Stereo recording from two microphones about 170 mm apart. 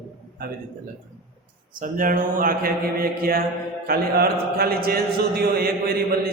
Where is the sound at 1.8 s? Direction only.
55° right (ahead or behind).